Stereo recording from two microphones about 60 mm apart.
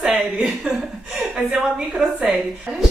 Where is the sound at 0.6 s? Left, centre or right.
Centre.